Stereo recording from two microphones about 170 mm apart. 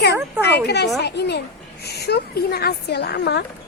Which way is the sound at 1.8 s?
70° left (ahead or behind).